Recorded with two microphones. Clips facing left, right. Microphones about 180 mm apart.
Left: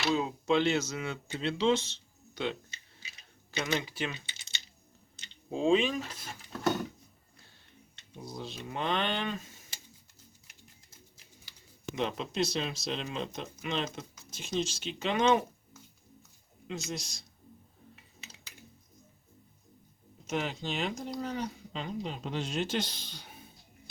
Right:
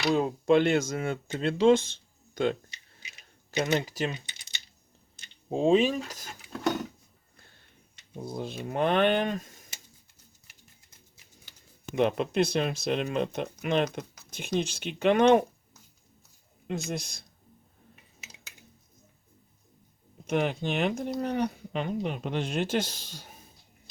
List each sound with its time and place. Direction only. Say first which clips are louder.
0.1 s speech: right 6 dB; 50° right (ahead or behind)
3.8 s speech: right 5 dB; 40° right (ahead or behind)
5.5 s speech: right 4 dB; 35° right (ahead or behind)
8.1 s speech: right 6 dB; 55° right (ahead or behind)
11.9 s speech: right 7 dB; 55° right (ahead or behind)
16.6 s speech: right 5 dB; 55° right (ahead or behind)
20.2 s speech: right 6 dB; 55° right (ahead or behind)